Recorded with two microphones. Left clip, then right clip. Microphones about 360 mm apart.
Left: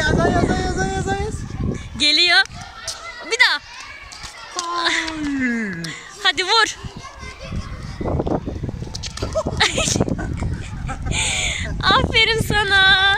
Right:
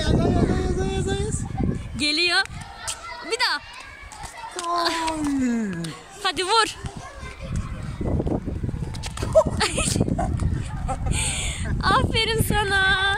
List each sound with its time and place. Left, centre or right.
0.0 s vehicle: centre
2.0 s speech: centre
3.3 s children playing: centre
4.6 s speech: centre
8.0 s a sound: left
9.6 s a sound: centre
11.1 s speech: centre